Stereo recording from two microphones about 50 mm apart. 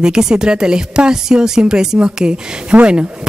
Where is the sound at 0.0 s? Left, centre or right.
Centre.